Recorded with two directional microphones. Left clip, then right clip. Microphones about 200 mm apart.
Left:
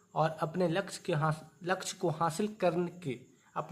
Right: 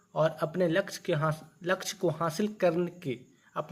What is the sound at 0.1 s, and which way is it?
A man's voice, 5° right (ahead or behind).